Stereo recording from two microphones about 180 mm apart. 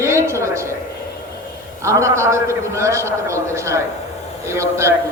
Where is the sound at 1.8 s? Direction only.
15° right (ahead or behind).